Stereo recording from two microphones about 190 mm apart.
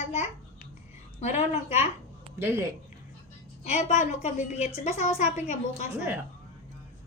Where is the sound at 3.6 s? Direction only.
35° left (ahead or behind).